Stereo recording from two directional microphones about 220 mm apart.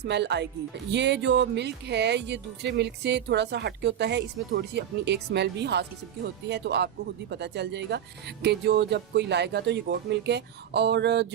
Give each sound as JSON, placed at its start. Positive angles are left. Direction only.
{"t": 0.0, "sound": "speech", "side_deg": -50}